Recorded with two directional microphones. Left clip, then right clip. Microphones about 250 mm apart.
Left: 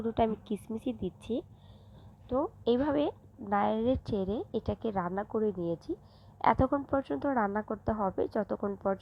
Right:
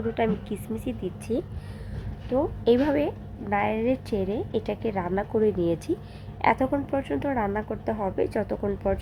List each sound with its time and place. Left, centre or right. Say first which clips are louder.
0.1 s a woman's voice: right 3 dB; left
7.1 s a woman's voice: right 4 dB; centre